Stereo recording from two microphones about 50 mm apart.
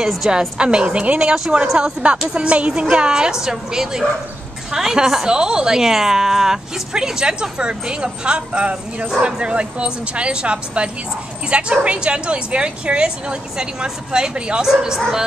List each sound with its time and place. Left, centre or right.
0.3 s a woman's voice: centre